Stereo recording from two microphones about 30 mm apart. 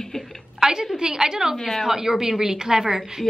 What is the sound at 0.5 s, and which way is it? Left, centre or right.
A woman's voice, centre.